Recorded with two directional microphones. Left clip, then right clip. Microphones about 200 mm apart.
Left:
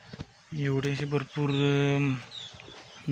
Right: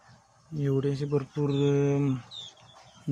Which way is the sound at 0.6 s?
20° right (ahead or behind).